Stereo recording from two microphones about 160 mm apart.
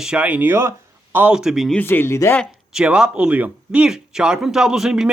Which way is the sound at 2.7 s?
5° right (ahead or behind).